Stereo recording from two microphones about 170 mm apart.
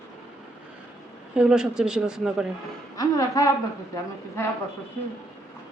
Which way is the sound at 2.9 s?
20° left (ahead or behind).